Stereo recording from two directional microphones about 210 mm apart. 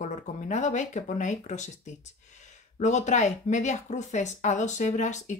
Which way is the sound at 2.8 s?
35° left (ahead or behind).